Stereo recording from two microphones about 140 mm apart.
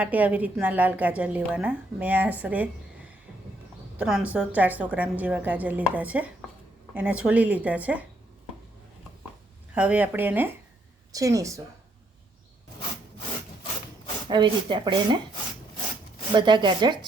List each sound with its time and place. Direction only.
0.0 s a woman's voice: 10° right (ahead or behind)
3.9 s a woman's voice: 5° right (ahead or behind)
9.7 s a woman's voice: 10° right (ahead or behind)
11.1 s a woman's voice: 25° right (ahead or behind)
14.3 s speech: 35° right (ahead or behind)
16.3 s speech: 35° right (ahead or behind)